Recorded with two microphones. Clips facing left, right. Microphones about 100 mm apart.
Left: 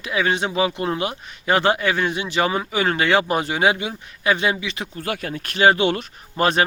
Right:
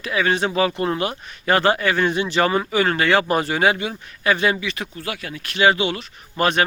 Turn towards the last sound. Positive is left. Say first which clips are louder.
# even
turn(degrees=30)  # may be behind; listen again after turning